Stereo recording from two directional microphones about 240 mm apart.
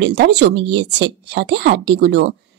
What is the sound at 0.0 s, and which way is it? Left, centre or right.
A woman's voice, right.